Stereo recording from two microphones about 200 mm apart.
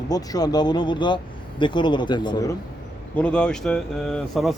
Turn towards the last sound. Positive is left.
turn(degrees=0)  # may be behind; listen again after turning